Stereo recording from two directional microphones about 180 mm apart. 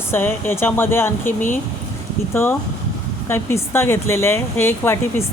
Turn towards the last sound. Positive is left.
turn(degrees=15)  # may be behind; listen again after turning